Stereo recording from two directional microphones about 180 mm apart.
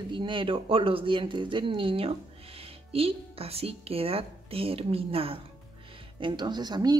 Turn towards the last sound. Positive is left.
turn(degrees=-25)  # may be behind; listen again after turning